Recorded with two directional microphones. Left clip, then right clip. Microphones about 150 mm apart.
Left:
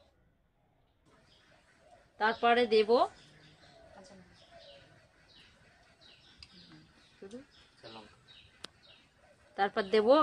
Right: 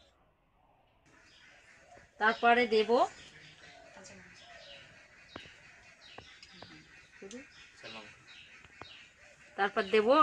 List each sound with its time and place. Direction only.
2.1 s speech: centre (ahead or behind)
9.6 s a woman's voice: 25° left (ahead or behind)